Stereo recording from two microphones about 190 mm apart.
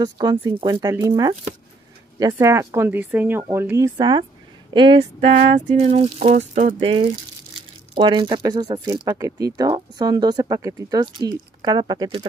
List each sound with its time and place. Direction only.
0.0 s speech: 20° right (ahead or behind)